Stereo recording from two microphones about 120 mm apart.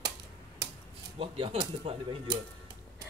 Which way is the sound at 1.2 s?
45° right (ahead or behind).